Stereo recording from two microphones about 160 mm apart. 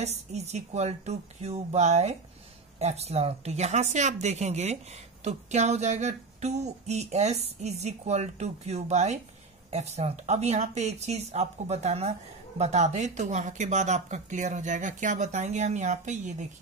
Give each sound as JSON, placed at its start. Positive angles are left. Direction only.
{"t": 0.0, "sound": "a woman's voice", "side_deg": -45}